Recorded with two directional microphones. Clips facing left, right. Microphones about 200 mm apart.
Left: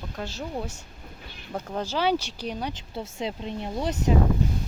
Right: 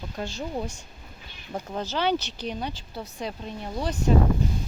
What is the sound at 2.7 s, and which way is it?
Speech, 25° left (ahead or behind).